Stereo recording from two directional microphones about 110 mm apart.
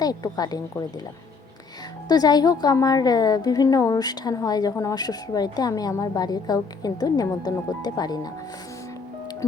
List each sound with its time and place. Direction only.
0.0 s a woman's voice: 35° left (ahead or behind)
2.0 s a woman's voice: 35° left (ahead or behind)